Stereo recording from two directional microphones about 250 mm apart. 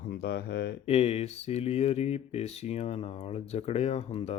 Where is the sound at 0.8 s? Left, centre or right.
Left.